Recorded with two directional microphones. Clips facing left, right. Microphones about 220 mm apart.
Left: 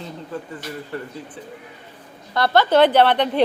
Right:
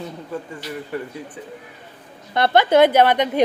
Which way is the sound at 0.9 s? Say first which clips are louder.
Right 3 dB; 15° right (ahead or behind).